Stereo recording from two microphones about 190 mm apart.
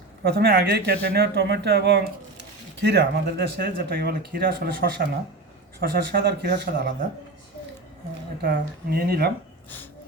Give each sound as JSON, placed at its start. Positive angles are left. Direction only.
{"t": 0.2, "sound": "speech", "side_deg": -55}
{"t": 8.4, "sound": "speech", "side_deg": -55}